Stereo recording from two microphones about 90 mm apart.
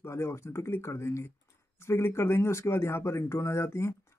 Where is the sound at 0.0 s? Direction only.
30° left (ahead or behind).